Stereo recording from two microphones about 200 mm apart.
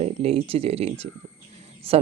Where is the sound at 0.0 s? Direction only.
30° right (ahead or behind).